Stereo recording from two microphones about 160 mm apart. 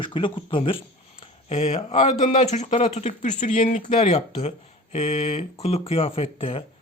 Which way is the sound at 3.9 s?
40° left (ahead or behind).